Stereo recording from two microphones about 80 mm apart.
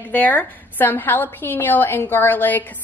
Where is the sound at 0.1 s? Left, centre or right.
Left.